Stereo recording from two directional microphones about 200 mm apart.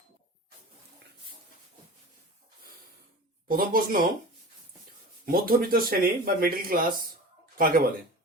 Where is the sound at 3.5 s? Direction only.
45° right (ahead or behind).